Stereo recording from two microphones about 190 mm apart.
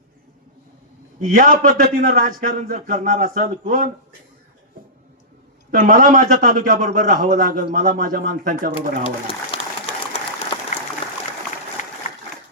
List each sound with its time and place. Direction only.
1.4 s a man's voice: 45° right (ahead or behind)
5.7 s a man's voice: 45° right (ahead or behind)
9.2 s applause: 30° left (ahead or behind)